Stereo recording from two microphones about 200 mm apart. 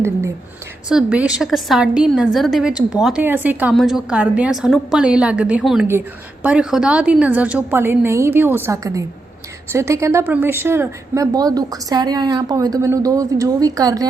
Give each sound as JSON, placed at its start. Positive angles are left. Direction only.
{"t": 0.9, "sound": "a woman's voice", "side_deg": -5}